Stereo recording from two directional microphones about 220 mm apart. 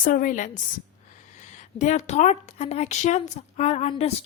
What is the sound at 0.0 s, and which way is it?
A woman's voice, 40° left (ahead or behind).